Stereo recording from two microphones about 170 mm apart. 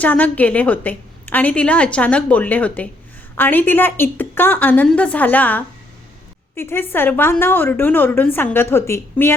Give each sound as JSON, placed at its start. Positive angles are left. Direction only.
{"t": 0.0, "sound": "a woman's voice", "side_deg": 10}